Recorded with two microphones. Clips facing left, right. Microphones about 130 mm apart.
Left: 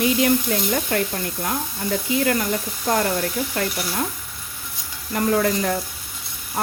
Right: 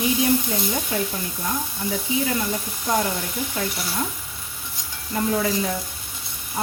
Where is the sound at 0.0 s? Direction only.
75° left (ahead or behind).